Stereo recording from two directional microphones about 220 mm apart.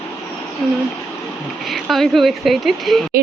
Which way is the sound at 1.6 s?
Centre (ahead or behind).